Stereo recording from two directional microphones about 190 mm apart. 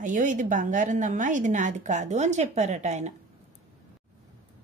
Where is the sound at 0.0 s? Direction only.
40° right (ahead or behind).